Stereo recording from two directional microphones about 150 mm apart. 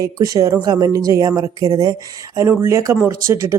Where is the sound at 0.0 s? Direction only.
25° right (ahead or behind).